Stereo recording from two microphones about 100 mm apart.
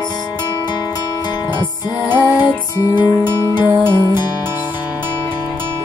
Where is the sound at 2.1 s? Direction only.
20° right (ahead or behind).